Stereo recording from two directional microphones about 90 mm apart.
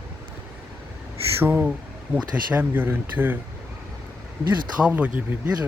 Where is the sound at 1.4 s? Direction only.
25° right (ahead or behind).